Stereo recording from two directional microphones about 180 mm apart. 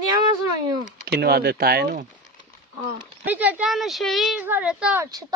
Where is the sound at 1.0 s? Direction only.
60° right (ahead or behind).